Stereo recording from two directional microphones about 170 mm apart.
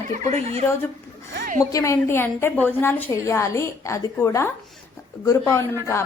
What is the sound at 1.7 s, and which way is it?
A woman's voice, 15° left (ahead or behind).